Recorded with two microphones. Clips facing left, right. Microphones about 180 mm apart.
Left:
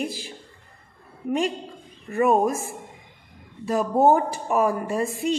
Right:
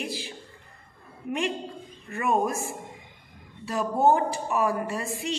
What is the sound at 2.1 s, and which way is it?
Speech, 40° left (ahead or behind).